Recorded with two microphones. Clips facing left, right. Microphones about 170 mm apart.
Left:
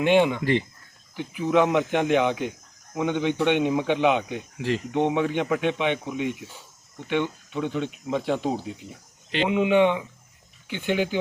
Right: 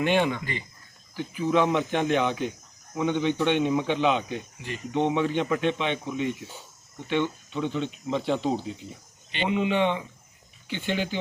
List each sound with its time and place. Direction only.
0.0 s speech: 15° left (ahead or behind)
4.5 s speech: 90° left
4.9 s speech: 15° left (ahead or behind)